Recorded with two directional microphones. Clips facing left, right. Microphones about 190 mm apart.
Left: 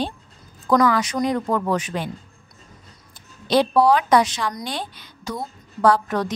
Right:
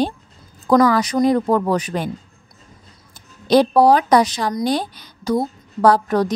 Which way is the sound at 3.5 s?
40° right (ahead or behind).